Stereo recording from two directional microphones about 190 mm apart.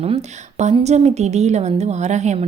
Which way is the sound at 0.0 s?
35° right (ahead or behind).